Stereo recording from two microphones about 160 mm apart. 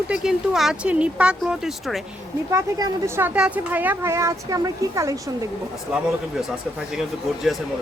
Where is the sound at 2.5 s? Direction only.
15° right (ahead or behind).